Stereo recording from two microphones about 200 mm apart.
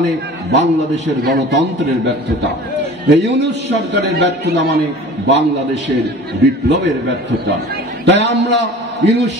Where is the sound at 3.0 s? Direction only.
60° right (ahead or behind).